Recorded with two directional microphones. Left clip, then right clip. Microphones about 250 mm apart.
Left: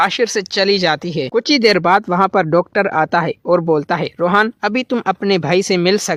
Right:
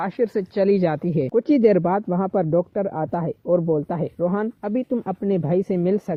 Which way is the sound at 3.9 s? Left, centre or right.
Left.